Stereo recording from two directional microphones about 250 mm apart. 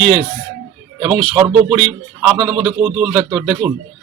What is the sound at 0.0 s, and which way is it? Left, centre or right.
Speech, right.